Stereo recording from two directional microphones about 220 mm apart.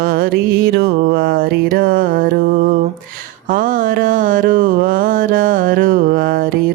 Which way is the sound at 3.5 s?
40° right (ahead or behind).